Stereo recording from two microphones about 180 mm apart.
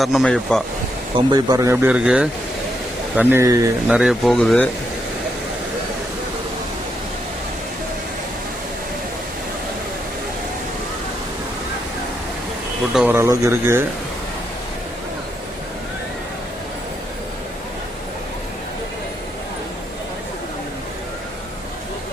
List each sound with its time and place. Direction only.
0.0 s speech: centre (ahead or behind)
1.3 s speech: 20° right (ahead or behind)
3.8 s speech: 5° right (ahead or behind)
12.9 s speech: 5° right (ahead or behind)
13.1 s speech: 15° right (ahead or behind)